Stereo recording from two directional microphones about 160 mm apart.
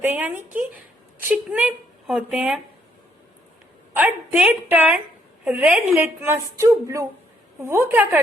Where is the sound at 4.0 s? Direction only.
10° right (ahead or behind).